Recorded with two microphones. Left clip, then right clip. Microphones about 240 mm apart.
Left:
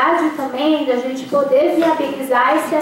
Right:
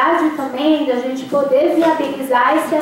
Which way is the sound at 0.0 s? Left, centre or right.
Centre.